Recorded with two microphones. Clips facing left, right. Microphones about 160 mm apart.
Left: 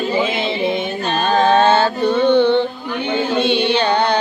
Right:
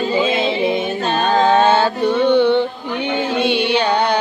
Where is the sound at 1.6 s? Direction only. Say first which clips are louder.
Even; 10° right (ahead or behind).